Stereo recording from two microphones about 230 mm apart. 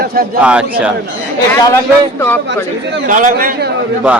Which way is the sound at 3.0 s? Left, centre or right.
Right.